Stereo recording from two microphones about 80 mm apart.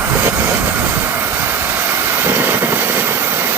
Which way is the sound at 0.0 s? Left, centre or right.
Right.